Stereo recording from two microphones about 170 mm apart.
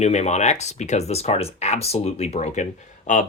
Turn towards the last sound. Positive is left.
turn(degrees=50)  # may be behind; listen again after turning